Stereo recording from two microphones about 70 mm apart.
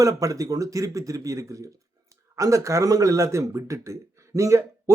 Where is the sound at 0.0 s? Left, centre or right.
Right.